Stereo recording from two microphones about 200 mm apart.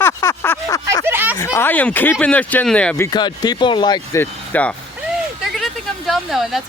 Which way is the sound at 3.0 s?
20° left (ahead or behind).